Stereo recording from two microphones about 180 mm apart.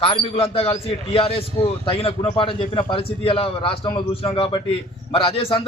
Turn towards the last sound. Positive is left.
turn(degrees=30)  # may be behind; listen again after turning